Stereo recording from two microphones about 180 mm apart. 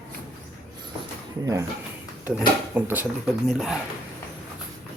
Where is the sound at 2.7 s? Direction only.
10° right (ahead or behind).